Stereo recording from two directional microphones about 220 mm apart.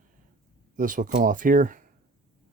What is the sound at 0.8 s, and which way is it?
Speech, 35° right (ahead or behind).